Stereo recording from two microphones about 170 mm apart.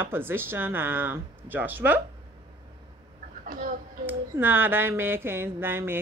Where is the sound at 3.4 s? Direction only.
50° right (ahead or behind).